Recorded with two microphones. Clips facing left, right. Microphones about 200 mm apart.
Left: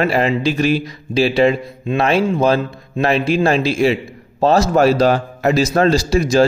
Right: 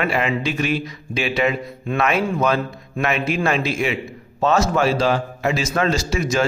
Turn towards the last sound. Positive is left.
turn(degrees=35)  # may be behind; listen again after turning